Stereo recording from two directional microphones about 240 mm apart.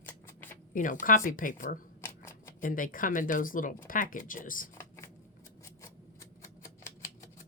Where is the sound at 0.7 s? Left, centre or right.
Left.